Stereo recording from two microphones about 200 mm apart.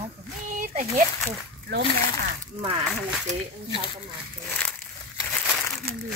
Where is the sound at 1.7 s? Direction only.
55° right (ahead or behind).